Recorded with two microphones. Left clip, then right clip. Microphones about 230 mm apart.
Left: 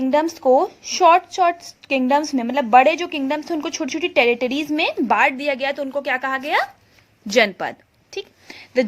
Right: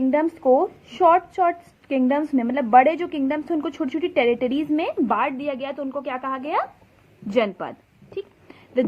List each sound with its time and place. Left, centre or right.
0.1 s a woman's voice: left